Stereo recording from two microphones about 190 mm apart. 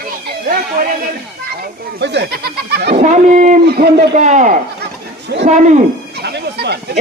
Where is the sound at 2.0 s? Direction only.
65° right (ahead or behind).